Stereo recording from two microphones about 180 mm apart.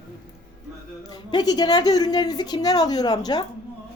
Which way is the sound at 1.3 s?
25° left (ahead or behind).